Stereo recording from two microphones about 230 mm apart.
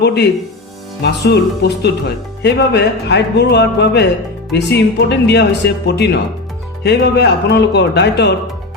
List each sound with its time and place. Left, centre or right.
0.0 s a man's voice: left